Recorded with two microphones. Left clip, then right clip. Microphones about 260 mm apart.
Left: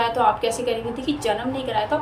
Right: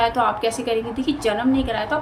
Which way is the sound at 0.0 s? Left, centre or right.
Centre.